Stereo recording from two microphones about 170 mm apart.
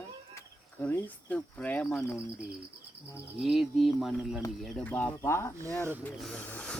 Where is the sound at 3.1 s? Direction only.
Centre (ahead or behind).